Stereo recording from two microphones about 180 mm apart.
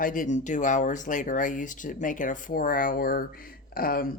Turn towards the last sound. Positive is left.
turn(degrees=55)  # may be behind; listen again after turning